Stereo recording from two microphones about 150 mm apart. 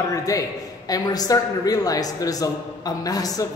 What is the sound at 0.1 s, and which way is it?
Speech, 25° left (ahead or behind).